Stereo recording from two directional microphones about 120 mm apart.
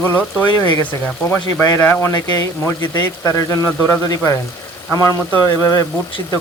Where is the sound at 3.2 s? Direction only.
25° left (ahead or behind).